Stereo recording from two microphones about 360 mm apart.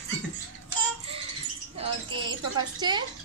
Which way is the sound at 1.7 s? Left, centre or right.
Centre.